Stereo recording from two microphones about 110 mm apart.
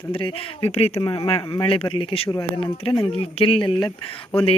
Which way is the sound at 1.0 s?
55° left (ahead or behind).